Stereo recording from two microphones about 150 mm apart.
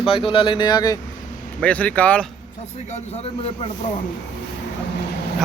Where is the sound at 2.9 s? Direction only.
45° left (ahead or behind).